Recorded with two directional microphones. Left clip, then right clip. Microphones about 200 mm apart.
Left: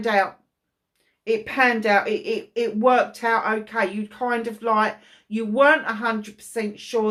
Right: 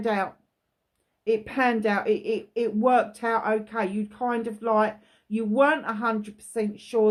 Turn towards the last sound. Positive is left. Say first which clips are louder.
# right 1 dB
turn(degrees=-45)  # may be behind; listen again after turning